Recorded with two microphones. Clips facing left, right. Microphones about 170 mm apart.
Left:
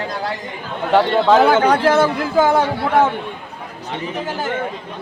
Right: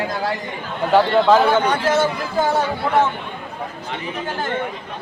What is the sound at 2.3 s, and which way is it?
Speech, 90° left.